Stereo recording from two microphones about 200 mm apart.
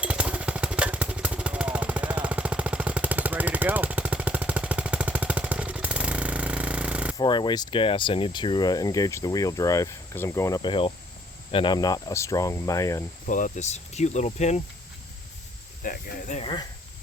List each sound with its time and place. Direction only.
0.0 s jackhammer: 5° right (ahead or behind)
7.2 s speech: 20° left (ahead or behind)
13.2 s speech: 40° left (ahead or behind)
15.8 s speech: 45° left (ahead or behind)